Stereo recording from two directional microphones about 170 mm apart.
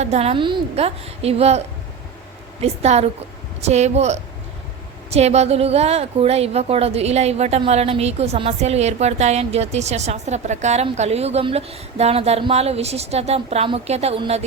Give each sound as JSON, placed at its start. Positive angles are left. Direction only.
{"t": 0.0, "sound": "a woman's voice", "side_deg": -40}